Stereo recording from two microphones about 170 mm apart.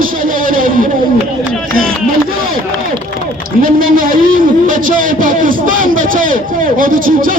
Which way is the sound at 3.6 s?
55° right (ahead or behind).